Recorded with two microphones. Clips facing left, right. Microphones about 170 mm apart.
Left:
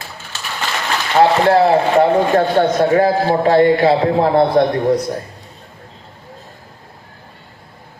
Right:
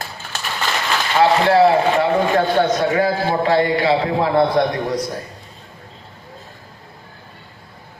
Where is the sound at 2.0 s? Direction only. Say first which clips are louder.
Left 4 dB; 45° left (ahead or behind).